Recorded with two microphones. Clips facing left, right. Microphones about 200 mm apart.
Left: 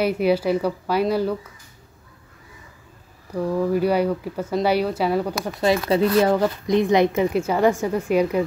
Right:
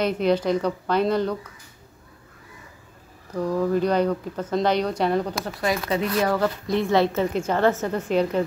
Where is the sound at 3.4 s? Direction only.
10° left (ahead or behind).